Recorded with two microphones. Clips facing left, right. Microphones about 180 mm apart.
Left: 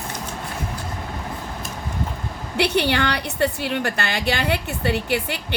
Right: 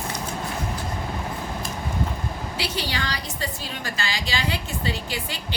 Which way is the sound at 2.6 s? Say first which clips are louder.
Left 11 dB; 60° left (ahead or behind).